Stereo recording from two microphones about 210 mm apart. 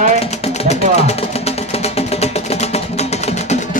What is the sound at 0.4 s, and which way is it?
Music, 30° left (ahead or behind).